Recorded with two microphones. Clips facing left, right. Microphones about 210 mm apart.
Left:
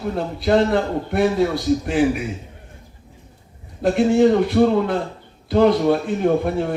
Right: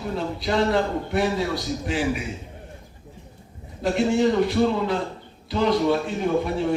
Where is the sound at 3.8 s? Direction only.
55° left (ahead or behind).